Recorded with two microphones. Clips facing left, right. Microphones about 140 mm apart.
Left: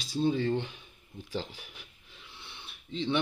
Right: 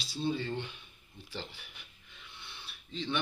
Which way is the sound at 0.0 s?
45° left (ahead or behind).